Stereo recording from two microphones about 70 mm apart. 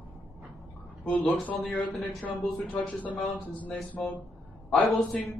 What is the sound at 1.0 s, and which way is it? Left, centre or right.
A man's voice, left.